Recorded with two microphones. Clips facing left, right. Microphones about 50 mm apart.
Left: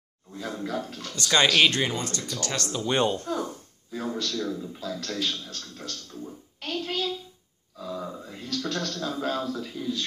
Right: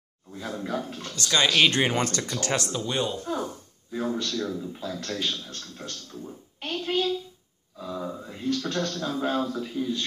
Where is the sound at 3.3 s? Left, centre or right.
Right.